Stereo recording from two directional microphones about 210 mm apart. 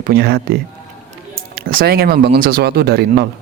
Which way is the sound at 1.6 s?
45° right (ahead or behind).